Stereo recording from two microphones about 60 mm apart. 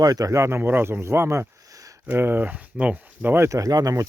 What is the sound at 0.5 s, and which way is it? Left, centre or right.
Speech, right.